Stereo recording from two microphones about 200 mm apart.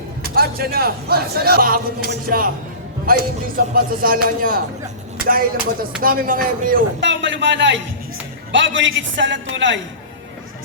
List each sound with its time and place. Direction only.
0.2 s speech: 50° right (ahead or behind)
7.0 s a man's voice: 65° right (ahead or behind)